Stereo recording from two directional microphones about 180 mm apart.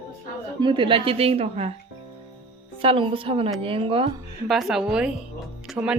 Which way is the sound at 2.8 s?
30° right (ahead or behind).